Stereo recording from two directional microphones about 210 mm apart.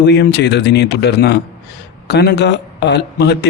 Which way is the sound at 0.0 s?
55° left (ahead or behind).